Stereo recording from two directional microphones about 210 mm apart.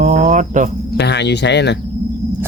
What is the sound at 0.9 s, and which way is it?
Speech, 55° left (ahead or behind).